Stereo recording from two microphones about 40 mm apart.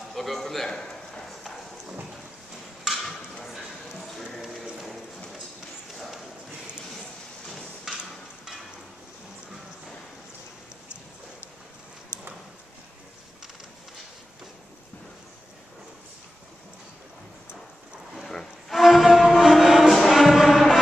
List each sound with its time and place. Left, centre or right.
0.1 s a man's voice: centre
0.7 s a man's voice: centre
1.2 s clip-clop: centre
2.9 s a sound: centre
4.4 s clip-clop: centre
5.9 s clip-clop: centre
12.1 s a sound: left
18.2 s music: centre
18.8 s music: centre